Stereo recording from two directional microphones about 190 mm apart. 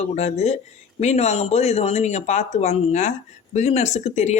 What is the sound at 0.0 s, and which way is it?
Speech, 35° left (ahead or behind).